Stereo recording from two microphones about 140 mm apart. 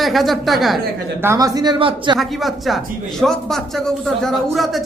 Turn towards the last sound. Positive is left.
turn(degrees=0)  # may be behind; listen again after turning